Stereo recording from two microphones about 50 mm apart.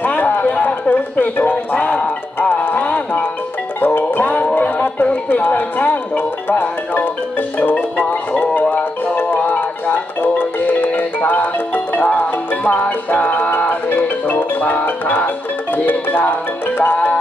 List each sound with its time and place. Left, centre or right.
0.0 s a sound: left
1.3 s speech: left
1.7 s speech: left
2.5 s music: left
5.3 s speech: left
8.0 s marimba: left
9.1 s music: left